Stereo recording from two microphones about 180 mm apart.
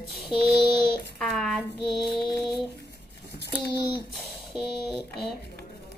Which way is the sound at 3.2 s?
65° left (ahead or behind).